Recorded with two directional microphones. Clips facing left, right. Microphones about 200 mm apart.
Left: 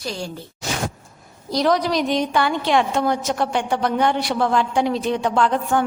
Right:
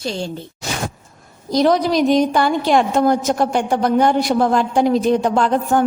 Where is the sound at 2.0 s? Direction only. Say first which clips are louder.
Right 5 dB; 45° right (ahead or behind).